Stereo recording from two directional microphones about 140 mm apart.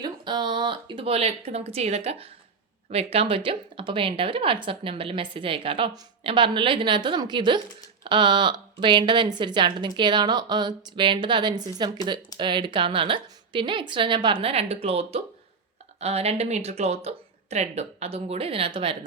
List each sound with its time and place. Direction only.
0.0 s speech: 30° right (ahead or behind)